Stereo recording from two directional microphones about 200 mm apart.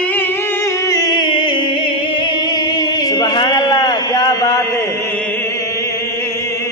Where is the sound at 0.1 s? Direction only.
10° left (ahead or behind).